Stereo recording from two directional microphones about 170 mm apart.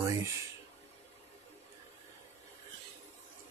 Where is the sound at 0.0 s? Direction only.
20° right (ahead or behind).